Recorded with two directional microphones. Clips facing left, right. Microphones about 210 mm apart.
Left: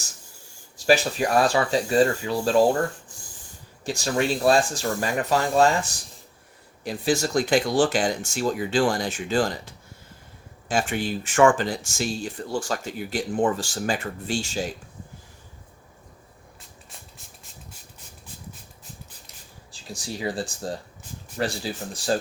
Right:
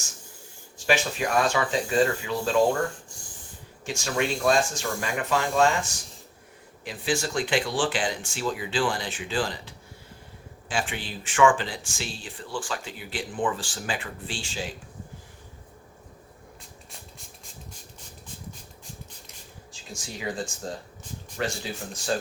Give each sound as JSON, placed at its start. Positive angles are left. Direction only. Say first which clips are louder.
{"t": 0.8, "sound": "speech", "louder": "left 5 dB", "side_deg": 40}
{"t": 3.8, "sound": "speech", "louder": "left 3 dB", "side_deg": 35}
{"t": 6.8, "sound": "speech", "louder": "left 4 dB", "side_deg": 40}
{"t": 19.7, "sound": "speech", "louder": "left 5 dB", "side_deg": 35}